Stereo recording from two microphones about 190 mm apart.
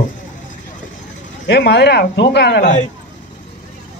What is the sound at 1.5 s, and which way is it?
Speech, 60° left (ahead or behind).